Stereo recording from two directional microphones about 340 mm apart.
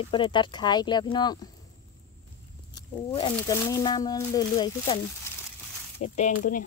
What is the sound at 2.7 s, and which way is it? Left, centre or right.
Speech, centre.